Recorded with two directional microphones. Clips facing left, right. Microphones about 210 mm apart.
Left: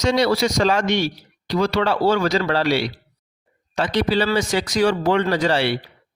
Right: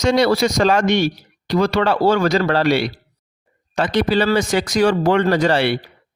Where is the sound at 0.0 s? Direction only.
55° right (ahead or behind).